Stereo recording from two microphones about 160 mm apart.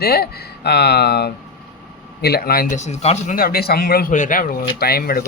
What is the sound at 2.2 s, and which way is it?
Speech, 80° left.